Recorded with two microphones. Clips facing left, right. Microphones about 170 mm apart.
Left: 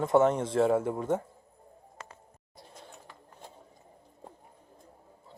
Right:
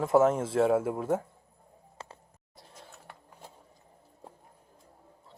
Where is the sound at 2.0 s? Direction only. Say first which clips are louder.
Right 1 dB; 30° right (ahead or behind).